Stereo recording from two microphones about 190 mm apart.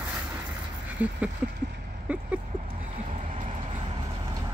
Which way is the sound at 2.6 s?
40° right (ahead or behind).